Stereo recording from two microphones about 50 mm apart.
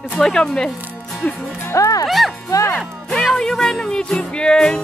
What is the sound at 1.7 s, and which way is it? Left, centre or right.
Speech, left.